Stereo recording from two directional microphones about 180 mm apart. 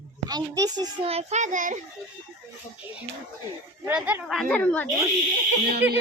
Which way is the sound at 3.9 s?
10° right (ahead or behind).